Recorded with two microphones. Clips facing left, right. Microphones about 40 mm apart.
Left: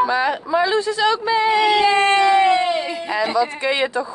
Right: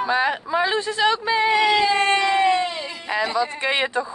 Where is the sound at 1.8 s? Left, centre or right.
Left.